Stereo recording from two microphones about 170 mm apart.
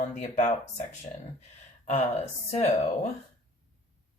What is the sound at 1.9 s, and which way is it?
Speech, 45° left (ahead or behind).